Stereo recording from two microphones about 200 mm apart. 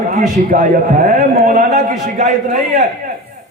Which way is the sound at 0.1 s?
40° right (ahead or behind).